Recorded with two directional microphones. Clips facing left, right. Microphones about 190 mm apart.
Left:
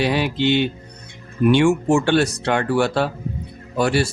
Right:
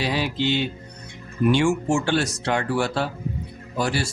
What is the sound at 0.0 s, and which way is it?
Speech, 60° left (ahead or behind).